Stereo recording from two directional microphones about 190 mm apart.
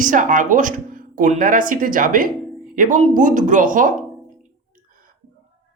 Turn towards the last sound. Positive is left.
turn(degrees=-45)  # may be behind; listen again after turning